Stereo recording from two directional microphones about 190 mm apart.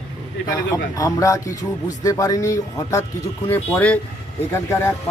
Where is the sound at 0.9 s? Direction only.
15° left (ahead or behind).